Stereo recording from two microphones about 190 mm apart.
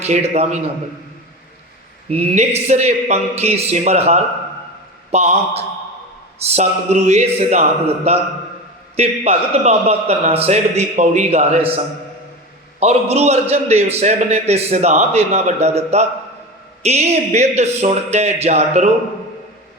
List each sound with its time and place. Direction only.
0.0 s a man's voice: 35° right (ahead or behind)
2.0 s a man's voice: 35° right (ahead or behind)
12.8 s a man's voice: 35° right (ahead or behind)